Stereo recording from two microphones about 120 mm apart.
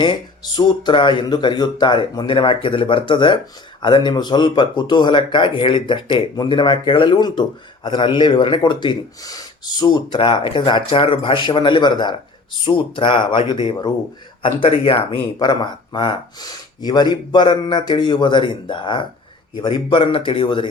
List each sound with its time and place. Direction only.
0.0 s speech: 40° left (ahead or behind)
15.4 s speech: 40° left (ahead or behind)